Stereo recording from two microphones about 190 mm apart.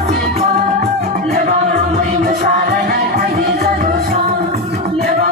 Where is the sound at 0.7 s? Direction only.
50° right (ahead or behind).